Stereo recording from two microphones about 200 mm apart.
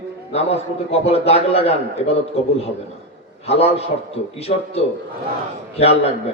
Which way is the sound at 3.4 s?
30° left (ahead or behind).